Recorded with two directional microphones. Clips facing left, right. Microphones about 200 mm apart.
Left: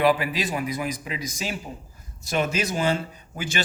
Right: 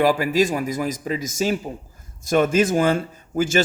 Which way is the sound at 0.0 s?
45° right (ahead or behind).